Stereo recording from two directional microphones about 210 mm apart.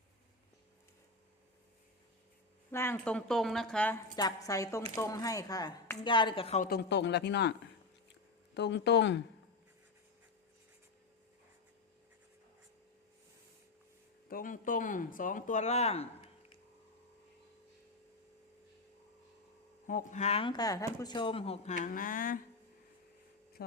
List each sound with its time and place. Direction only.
2.7 s a woman's voice: 10° left (ahead or behind)
4.1 s speech: 20° left (ahead or behind)
6.7 s speech: 50° left (ahead or behind)
8.5 s speech: 55° left (ahead or behind)
14.3 s speech: 40° left (ahead or behind)
19.9 s speech: 40° left (ahead or behind)
23.6 s a sound: 45° left (ahead or behind)